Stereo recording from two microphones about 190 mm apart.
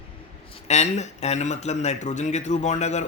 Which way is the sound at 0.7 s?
35° left (ahead or behind).